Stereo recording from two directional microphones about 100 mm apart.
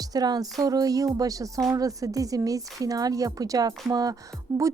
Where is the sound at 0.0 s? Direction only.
40° right (ahead or behind).